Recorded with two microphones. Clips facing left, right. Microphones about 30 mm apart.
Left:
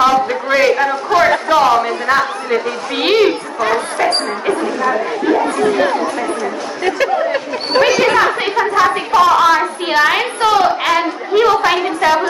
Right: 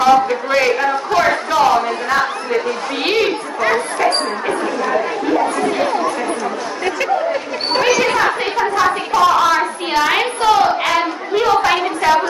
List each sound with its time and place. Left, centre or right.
0.0 s a man's voice: centre
5.6 s speech: left
8.0 s a woman's voice: centre